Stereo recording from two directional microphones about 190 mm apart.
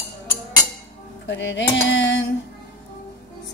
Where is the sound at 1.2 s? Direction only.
70° left (ahead or behind).